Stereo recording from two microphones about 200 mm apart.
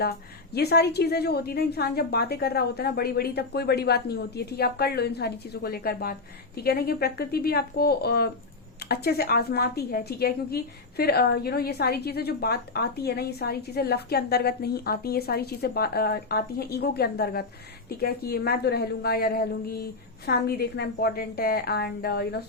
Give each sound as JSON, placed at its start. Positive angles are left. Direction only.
{"t": 0.0, "sound": "a woman's voice", "side_deg": 50}